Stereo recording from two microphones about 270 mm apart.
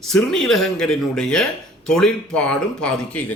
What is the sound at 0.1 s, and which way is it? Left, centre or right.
A man's voice, centre.